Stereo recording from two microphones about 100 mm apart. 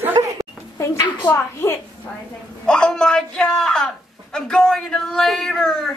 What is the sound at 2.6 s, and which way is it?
A woman's voice, 10° left (ahead or behind).